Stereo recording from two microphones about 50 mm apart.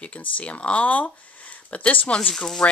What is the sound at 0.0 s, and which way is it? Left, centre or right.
Speech, left.